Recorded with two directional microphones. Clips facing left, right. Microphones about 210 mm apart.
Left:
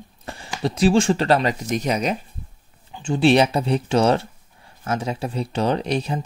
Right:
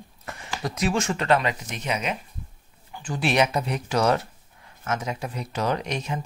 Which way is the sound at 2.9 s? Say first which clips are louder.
Left 9 dB; 25° left (ahead or behind).